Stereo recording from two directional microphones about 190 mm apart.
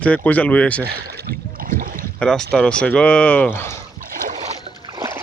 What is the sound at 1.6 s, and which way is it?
Boat, 45° right (ahead or behind).